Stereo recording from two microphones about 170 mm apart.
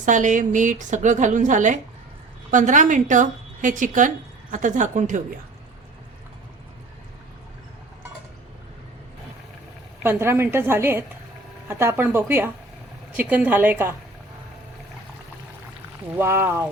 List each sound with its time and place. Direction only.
0.0 s a woman's voice: 45° right (ahead or behind)
10.0 s a woman's voice: 15° right (ahead or behind)
16.1 s a woman's voice: 15° right (ahead or behind)